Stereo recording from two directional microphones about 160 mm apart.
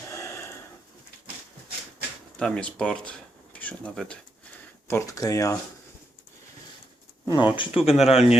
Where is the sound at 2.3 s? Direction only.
5° left (ahead or behind).